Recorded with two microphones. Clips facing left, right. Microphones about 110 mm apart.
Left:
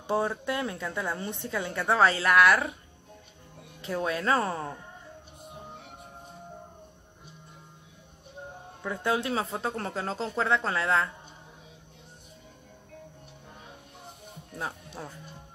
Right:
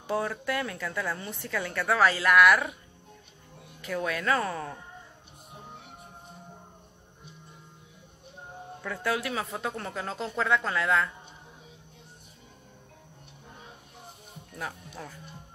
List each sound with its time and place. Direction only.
0.0 s a woman's voice: 25° left (ahead or behind)
3.8 s a woman's voice: 30° left (ahead or behind)
8.8 s a woman's voice: 25° left (ahead or behind)
14.6 s a woman's voice: 25° left (ahead or behind)